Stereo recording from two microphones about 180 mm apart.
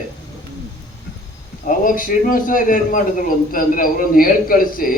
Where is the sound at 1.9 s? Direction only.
50° left (ahead or behind).